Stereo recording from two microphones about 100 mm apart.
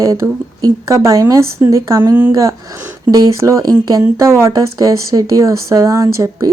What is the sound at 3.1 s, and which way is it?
A woman's voice, 35° right (ahead or behind).